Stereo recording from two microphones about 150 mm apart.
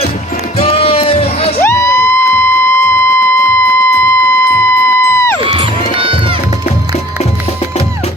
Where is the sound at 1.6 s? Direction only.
20° left (ahead or behind).